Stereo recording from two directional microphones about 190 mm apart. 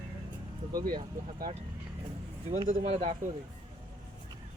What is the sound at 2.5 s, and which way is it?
Speech, 35° right (ahead or behind).